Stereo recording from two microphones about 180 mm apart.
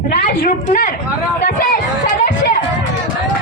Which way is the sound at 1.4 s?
50° left (ahead or behind).